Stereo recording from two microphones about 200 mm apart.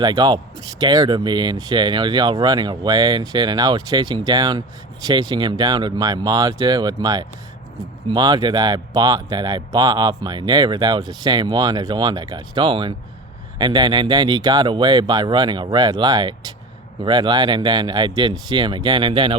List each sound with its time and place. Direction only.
0.0 s speech: 20° right (ahead or behind)